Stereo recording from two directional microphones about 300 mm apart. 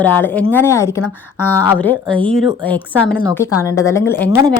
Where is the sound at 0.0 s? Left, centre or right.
Centre.